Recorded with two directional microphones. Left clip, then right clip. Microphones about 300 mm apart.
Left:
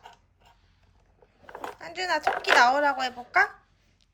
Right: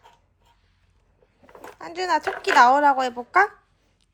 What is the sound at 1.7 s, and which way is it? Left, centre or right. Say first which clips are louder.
A woman's voice: right 5 dB; centre.